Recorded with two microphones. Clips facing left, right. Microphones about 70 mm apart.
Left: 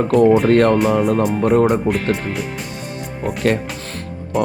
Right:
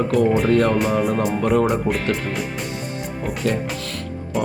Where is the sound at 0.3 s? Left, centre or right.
Centre.